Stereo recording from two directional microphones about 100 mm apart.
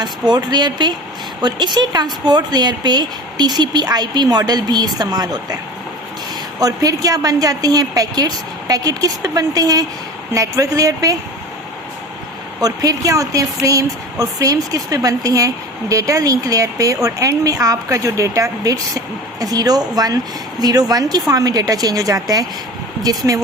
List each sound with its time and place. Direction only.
0.0 s speech: 45° right (ahead or behind)
6.6 s speech: 35° right (ahead or behind)
12.6 s speech: 35° right (ahead or behind)